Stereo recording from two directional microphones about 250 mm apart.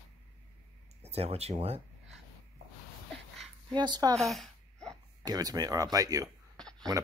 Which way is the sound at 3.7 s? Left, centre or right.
Centre.